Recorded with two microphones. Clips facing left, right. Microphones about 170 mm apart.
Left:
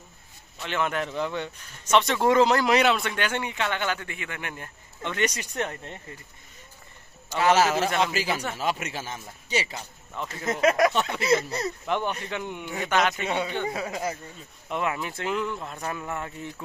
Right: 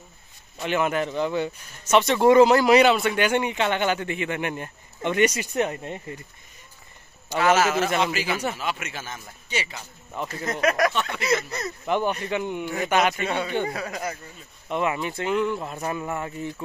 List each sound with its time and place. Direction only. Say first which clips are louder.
0.6 s speech: right 4 dB; 10° right (ahead or behind)
7.4 s speech: right 1 dB; 35° left (ahead or behind)
10.1 s speech: right 3 dB; 5° right (ahead or behind)
10.5 s speech: left 1 dB; 25° left (ahead or behind)
11.8 s speech: right 8 dB; 5° right (ahead or behind)
13.1 s a man's voice: right 2 dB; 15° left (ahead or behind)
14.7 s speech: right 3 dB; centre (ahead or behind)